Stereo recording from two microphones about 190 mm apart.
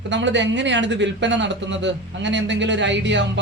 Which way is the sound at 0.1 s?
70° right (ahead or behind).